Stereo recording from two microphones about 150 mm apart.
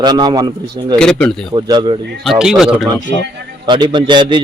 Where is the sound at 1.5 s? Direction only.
30° right (ahead or behind).